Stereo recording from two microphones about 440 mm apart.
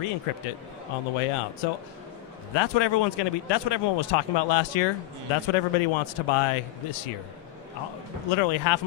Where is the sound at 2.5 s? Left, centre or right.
Left.